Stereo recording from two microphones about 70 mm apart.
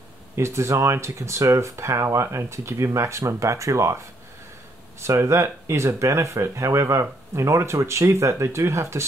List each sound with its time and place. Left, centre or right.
0.4 s speech: right
5.0 s speech: right